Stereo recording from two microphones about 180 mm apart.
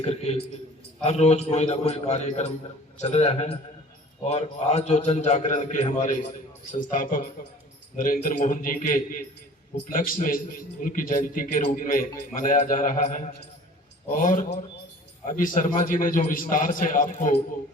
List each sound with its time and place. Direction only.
0.0 s a man's voice: 35° left (ahead or behind)